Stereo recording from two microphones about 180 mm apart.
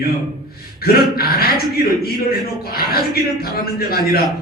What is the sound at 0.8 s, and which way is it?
A man's voice, 55° left (ahead or behind).